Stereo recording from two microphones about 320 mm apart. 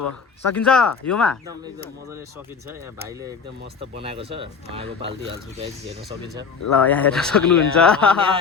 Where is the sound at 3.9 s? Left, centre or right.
Centre.